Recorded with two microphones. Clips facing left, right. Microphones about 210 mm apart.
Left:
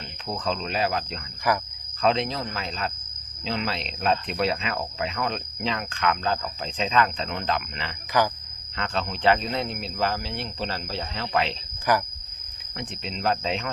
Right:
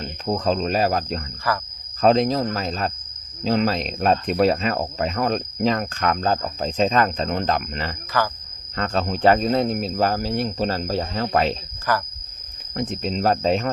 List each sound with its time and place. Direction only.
0.0 s speech: 40° right (ahead or behind)
1.5 s speech: 15° left (ahead or behind)
2.0 s speech: 40° right (ahead or behind)
8.1 s speech: 15° left (ahead or behind)
8.7 s speech: 45° right (ahead or behind)
11.9 s speech: 15° left (ahead or behind)
12.7 s speech: 45° right (ahead or behind)